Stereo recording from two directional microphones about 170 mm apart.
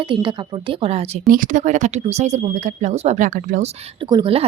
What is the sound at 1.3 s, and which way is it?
Speech, 50° right (ahead or behind).